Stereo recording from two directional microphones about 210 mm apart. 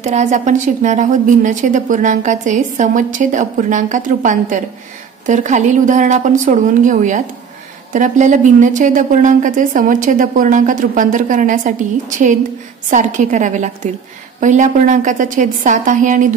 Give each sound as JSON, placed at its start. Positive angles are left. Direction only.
{"t": 0.0, "sound": "a woman's voice", "side_deg": -35}
{"t": 12.9, "sound": "a woman's voice", "side_deg": -35}